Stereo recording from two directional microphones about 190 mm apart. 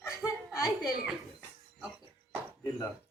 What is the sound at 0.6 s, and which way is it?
Speech, 15° left (ahead or behind).